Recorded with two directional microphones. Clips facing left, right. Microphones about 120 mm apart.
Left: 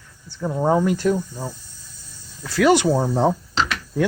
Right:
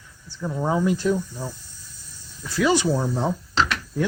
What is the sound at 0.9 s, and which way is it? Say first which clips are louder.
Speech: left 2 dB; 55° left (ahead or behind).